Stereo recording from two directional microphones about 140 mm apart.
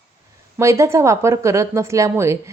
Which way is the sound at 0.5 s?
20° right (ahead or behind).